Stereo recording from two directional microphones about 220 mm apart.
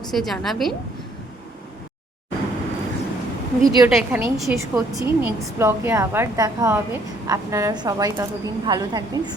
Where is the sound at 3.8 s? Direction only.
5° right (ahead or behind).